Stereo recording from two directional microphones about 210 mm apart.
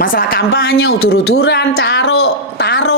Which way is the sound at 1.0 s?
75° left (ahead or behind).